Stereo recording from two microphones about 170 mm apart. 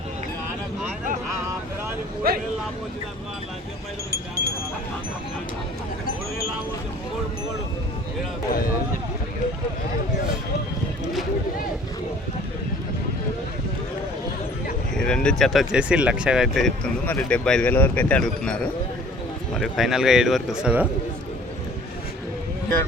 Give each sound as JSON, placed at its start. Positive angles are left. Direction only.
{"t": 2.3, "sound": "speech", "side_deg": -60}
{"t": 4.1, "sound": "a sound", "side_deg": -65}
{"t": 14.9, "sound": "speech", "side_deg": 5}